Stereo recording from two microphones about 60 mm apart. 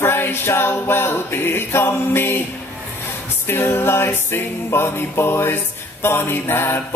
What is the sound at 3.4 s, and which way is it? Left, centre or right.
Mantra, left.